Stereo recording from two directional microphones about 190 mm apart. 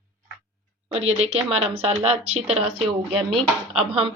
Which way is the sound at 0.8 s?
35° right (ahead or behind).